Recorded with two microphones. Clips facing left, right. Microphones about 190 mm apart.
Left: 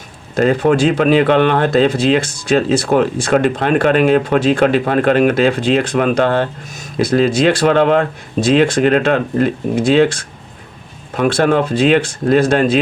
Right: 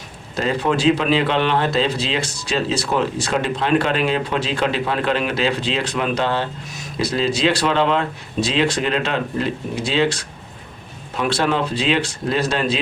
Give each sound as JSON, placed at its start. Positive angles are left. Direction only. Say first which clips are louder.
{"t": 0.3, "sound": "speech", "louder": "left 8 dB", "side_deg": 50}